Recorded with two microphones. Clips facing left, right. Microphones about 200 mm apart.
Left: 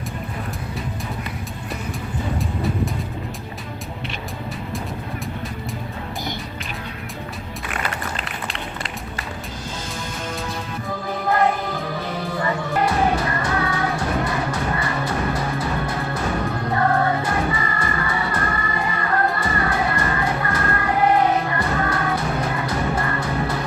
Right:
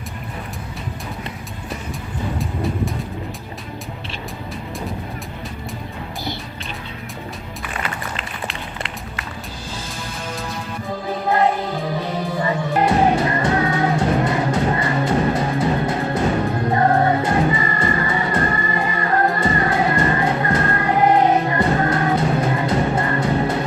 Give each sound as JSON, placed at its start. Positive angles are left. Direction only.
{"t": 12.4, "sound": "music", "side_deg": -20}